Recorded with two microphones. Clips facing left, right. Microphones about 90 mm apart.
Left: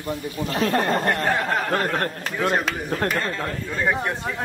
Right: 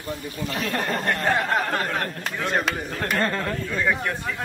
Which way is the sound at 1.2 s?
Centre (ahead or behind).